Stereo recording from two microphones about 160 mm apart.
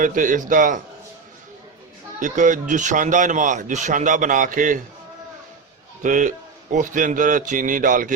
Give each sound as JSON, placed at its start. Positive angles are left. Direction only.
{"t": 0.0, "sound": "a man's voice", "side_deg": -55}
{"t": 2.1, "sound": "speech", "side_deg": -55}
{"t": 6.0, "sound": "a man's voice", "side_deg": -55}